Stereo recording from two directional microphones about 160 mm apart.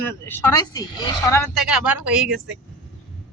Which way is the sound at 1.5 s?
5° right (ahead or behind).